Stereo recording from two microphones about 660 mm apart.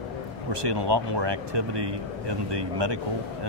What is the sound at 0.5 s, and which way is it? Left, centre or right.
Speech, right.